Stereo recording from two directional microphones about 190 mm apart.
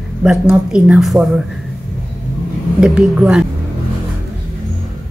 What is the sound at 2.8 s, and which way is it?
Speech, 5° right (ahead or behind).